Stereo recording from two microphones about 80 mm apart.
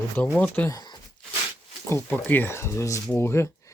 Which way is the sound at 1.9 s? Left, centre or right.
Left.